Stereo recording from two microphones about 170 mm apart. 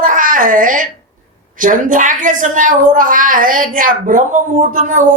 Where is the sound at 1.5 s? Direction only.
50° right (ahead or behind).